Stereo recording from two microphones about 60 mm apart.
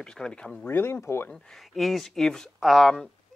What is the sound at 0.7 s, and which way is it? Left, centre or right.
Speech, left.